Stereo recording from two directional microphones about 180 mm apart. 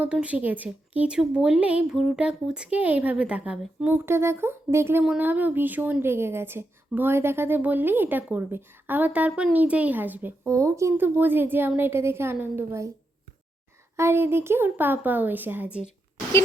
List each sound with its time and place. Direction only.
0.0 s a woman's voice: 5° right (ahead or behind)
13.9 s a woman's voice: 15° right (ahead or behind)